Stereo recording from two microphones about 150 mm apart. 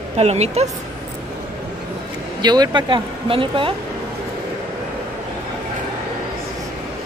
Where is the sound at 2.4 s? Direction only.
30° right (ahead or behind).